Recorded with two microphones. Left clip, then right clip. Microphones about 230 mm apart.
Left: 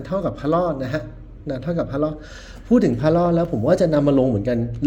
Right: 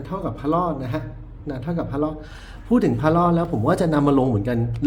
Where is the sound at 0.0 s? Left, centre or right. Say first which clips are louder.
Left 4 dB; centre.